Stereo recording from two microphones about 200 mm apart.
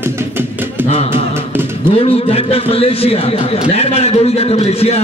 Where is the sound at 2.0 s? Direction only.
30° left (ahead or behind).